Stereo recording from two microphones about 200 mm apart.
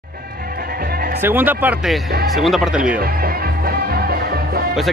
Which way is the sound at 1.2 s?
10° right (ahead or behind).